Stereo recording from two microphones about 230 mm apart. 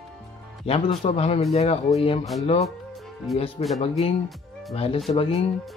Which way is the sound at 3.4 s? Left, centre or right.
Left.